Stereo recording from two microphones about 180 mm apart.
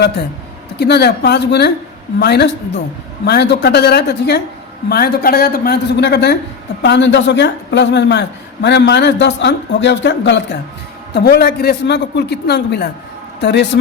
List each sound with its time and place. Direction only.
0.8 s a man's voice: 65° left (ahead or behind); by 10.4 s 85° left
11.1 s a man's voice: 65° left (ahead or behind)